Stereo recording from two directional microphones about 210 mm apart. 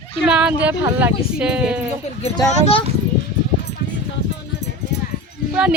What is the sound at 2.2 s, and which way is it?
Speech, 20° left (ahead or behind).